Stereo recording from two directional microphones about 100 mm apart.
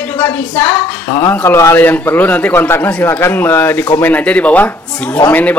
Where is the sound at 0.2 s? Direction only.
20° left (ahead or behind).